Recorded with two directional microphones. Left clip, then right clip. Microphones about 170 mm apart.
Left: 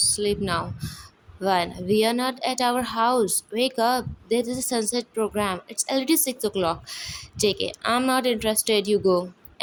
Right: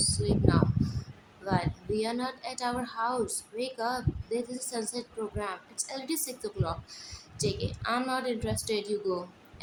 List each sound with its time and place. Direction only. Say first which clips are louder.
0.1 s speech: left 5 dB; 50° left (ahead or behind)